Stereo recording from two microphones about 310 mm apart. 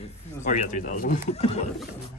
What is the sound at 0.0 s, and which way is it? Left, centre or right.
Speech, left.